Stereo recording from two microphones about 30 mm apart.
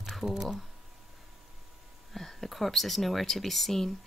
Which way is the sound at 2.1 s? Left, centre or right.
Centre.